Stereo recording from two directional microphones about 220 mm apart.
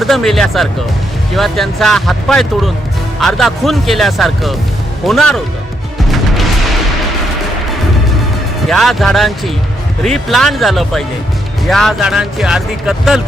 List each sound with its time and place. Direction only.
0.0 s speech: centre (ahead or behind)
8.6 s speech: centre (ahead or behind)